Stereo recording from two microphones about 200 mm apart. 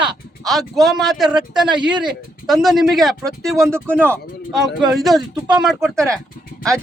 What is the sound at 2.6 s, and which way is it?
Speech, centre (ahead or behind).